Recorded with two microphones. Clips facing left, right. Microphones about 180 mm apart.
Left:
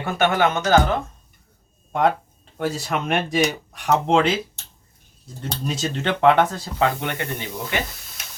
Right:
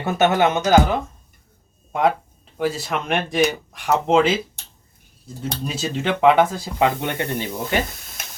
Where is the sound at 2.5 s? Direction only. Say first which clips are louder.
Right 1 dB; centre (ahead or behind); by 7.2 s 20° right (ahead or behind).